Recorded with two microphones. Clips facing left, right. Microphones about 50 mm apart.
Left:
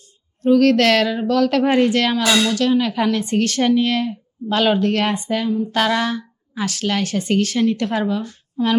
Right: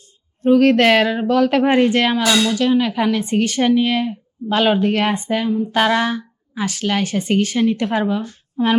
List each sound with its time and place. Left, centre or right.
0.4 s a woman's voice: right